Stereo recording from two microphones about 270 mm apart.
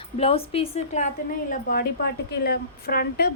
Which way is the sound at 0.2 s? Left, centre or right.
Left.